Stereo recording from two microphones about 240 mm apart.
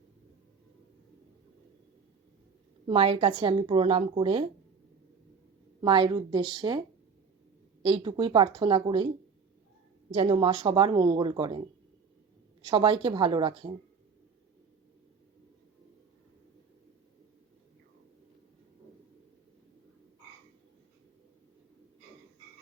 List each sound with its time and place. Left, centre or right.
2.8 s a woman's voice: right
5.8 s a woman's voice: centre
10.1 s a woman's voice: right
12.6 s a woman's voice: centre